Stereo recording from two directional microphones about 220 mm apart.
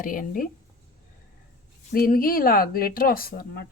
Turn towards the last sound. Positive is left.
turn(degrees=45)  # may be behind; listen again after turning